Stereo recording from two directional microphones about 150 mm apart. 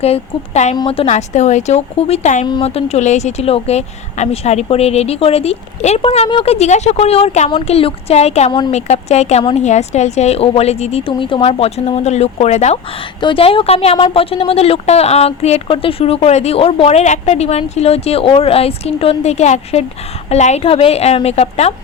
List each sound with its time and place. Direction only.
0.0 s speech: 45° left (ahead or behind)
2.5 s speech: 40° left (ahead or behind)
13.2 s a woman's voice: 35° left (ahead or behind)